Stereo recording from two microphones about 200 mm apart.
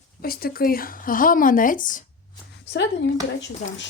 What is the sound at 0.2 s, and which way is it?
Speech, 50° left (ahead or behind).